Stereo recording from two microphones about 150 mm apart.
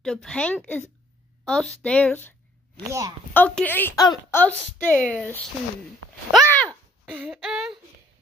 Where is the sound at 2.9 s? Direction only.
20° right (ahead or behind).